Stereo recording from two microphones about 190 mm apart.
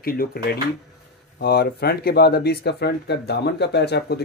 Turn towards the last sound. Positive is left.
turn(degrees=60)  # may be behind; listen again after turning